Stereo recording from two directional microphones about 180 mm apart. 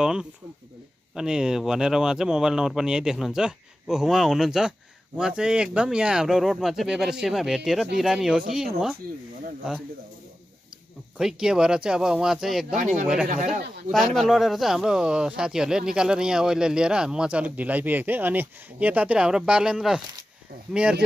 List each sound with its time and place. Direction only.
0.0 s speech: 5° right (ahead or behind)
11.1 s speech: 5° right (ahead or behind)
12.7 s speech: 45° right (ahead or behind)
13.5 s speech: centre (ahead or behind)